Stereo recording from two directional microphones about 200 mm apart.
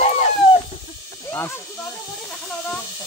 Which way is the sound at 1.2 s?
10° left (ahead or behind).